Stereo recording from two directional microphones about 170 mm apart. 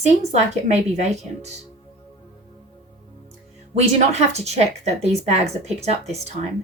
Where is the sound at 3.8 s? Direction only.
40° right (ahead or behind).